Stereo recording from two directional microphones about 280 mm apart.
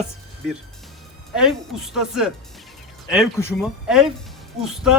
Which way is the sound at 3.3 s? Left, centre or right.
Centre.